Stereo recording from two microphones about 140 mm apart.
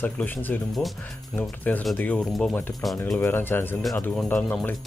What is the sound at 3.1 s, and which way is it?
Speech, 15° left (ahead or behind).